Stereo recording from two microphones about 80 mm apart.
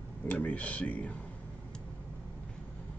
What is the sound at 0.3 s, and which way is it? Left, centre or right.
Speech, centre.